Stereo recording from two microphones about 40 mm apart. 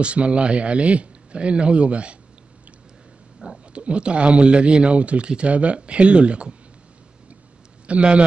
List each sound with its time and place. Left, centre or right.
0.0 s speech: right
3.4 s speech: right
7.8 s a man's voice: right